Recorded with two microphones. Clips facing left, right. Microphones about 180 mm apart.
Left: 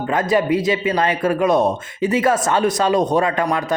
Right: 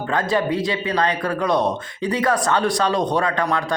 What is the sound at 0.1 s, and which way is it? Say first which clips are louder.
A man's voice: left 3 dB; 20° left (ahead or behind).